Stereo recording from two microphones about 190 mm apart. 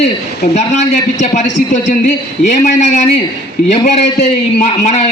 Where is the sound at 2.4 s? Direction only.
40° left (ahead or behind).